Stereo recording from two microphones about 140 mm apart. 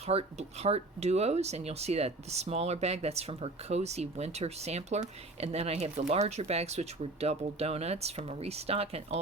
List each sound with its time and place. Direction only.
0.0 s speech: 50° right (ahead or behind)